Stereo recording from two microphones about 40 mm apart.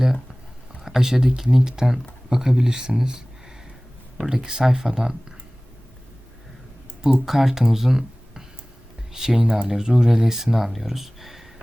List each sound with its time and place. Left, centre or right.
0.8 s speech: centre
7.3 s speech: centre